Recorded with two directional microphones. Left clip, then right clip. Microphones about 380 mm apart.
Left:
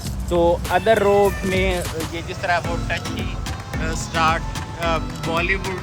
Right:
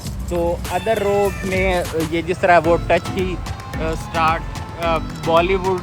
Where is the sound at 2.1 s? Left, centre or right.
Centre.